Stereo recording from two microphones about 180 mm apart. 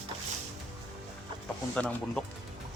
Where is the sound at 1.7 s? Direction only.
5° left (ahead or behind).